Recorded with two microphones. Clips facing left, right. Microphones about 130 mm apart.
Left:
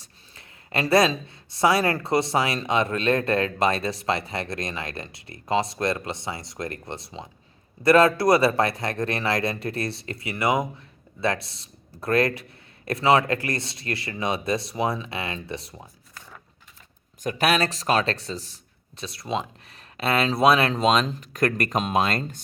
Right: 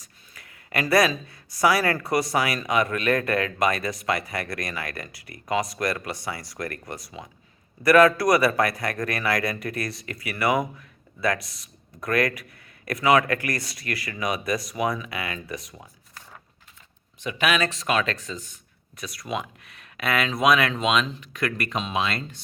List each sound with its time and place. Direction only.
0.0 s speech: 25° left (ahead or behind)
17.2 s speech: 40° left (ahead or behind)